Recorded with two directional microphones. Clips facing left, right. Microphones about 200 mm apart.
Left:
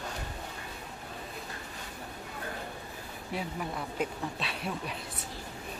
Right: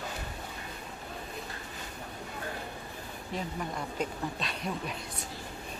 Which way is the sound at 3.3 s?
5° left (ahead or behind).